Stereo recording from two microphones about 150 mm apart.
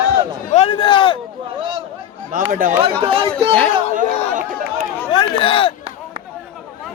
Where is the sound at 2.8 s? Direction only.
40° right (ahead or behind).